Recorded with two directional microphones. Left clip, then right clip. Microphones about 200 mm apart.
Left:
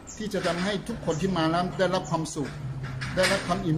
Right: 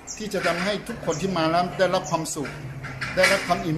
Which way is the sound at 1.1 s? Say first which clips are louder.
Right 3 dB; 5° left (ahead or behind).